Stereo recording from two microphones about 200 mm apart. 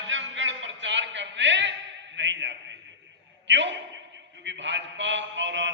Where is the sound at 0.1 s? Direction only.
70° right (ahead or behind).